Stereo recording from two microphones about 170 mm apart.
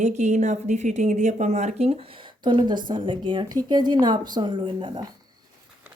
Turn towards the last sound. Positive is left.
turn(degrees=-30)  # may be behind; listen again after turning